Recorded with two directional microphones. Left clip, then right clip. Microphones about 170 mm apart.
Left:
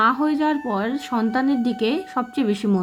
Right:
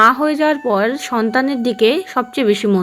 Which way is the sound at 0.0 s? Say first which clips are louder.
Right 7 dB; 25° right (ahead or behind).